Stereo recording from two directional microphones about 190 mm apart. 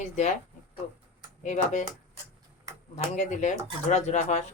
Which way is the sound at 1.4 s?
40° left (ahead or behind).